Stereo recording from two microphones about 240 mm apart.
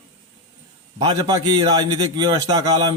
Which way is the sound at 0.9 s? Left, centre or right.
Centre.